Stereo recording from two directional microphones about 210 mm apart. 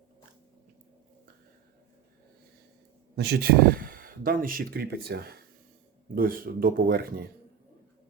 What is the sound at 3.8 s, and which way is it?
Speech, 40° right (ahead or behind).